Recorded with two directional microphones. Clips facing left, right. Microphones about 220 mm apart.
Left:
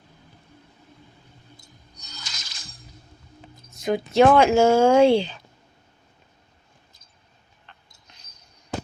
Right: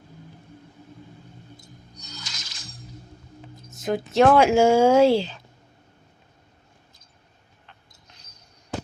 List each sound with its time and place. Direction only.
2.2 s music: 40° left (ahead or behind)
3.7 s speech: centre (ahead or behind)
7.7 s a sound: 5° right (ahead or behind)